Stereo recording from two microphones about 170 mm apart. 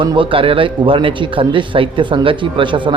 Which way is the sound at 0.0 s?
30° right (ahead or behind).